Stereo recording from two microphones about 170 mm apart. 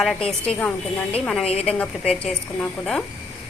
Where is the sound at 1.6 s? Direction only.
5° left (ahead or behind).